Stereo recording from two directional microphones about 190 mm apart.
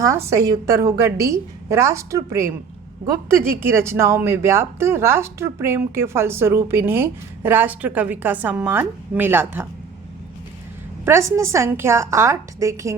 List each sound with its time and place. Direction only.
0.0 s speech: 15° right (ahead or behind)
3.6 s speech: 15° right (ahead or behind)
11.0 s a woman's voice: 15° right (ahead or behind)